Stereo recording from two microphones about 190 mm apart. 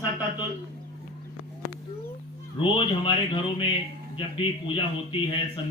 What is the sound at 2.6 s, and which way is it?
A man's voice, 25° left (ahead or behind).